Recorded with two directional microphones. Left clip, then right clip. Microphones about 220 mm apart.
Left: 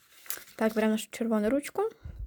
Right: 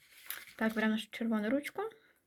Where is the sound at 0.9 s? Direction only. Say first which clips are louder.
Left 6 dB; 50° left (ahead or behind).